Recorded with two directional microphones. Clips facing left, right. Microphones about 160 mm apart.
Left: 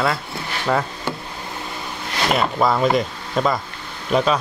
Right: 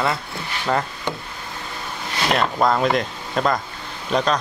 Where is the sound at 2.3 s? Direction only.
5° left (ahead or behind).